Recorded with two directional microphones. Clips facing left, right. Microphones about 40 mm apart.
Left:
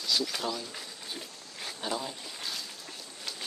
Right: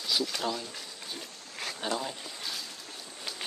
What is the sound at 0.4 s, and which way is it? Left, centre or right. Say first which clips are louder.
Speech: right 1 dB; centre.